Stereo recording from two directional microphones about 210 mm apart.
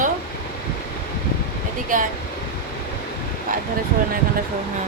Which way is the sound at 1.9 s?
40° right (ahead or behind).